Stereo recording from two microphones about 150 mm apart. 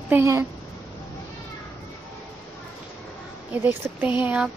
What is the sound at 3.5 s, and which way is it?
Speech, 10° right (ahead or behind).